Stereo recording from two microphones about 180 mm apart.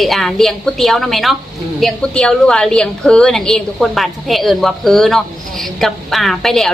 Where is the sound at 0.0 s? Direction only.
Centre (ahead or behind).